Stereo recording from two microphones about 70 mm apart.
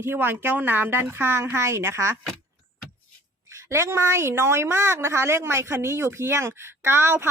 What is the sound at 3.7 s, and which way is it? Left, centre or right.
Speech, right.